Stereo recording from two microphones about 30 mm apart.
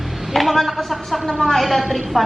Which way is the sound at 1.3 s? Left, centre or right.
Centre.